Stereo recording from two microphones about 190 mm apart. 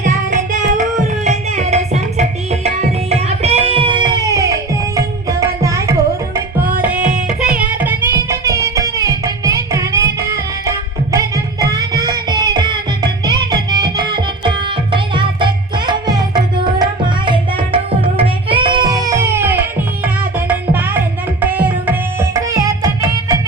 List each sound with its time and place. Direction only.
0.0 s music: 40° right (ahead or behind); by 4.5 s 15° right (ahead or behind)
4.9 s tabla: 15° right (ahead or behind)
7.6 s music: 10° right (ahead or behind)
17.2 s tabla: 25° right (ahead or behind)
18.2 s music: 25° right (ahead or behind)